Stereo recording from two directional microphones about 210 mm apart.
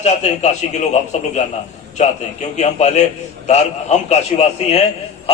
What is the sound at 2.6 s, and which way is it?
A man's voice, 35° left (ahead or behind).